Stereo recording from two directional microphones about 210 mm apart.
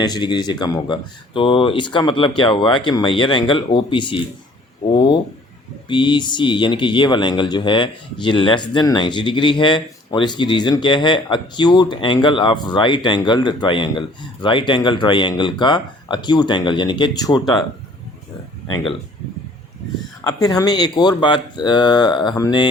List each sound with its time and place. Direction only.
0.0 s speech: 20° left (ahead or behind)
20.2 s speech: 15° left (ahead or behind)